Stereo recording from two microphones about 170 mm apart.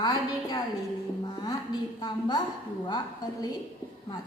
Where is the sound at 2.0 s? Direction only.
25° left (ahead or behind).